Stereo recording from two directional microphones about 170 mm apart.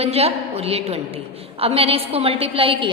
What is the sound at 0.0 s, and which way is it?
A woman's voice, 35° right (ahead or behind).